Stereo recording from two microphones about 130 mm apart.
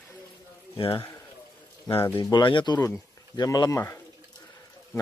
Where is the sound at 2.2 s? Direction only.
35° left (ahead or behind).